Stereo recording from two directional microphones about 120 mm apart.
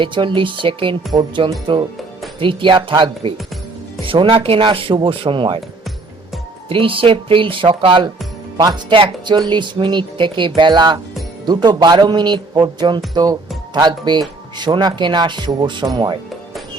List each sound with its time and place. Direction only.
0.0 s speech: 45° right (ahead or behind)
6.7 s speech: 50° right (ahead or behind)